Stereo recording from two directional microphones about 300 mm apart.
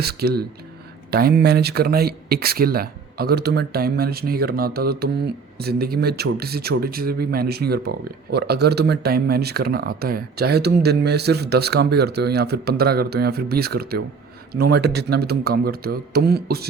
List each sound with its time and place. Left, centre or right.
0.0 s speech: right